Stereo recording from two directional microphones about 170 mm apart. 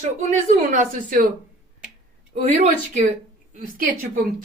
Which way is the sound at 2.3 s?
40° right (ahead or behind).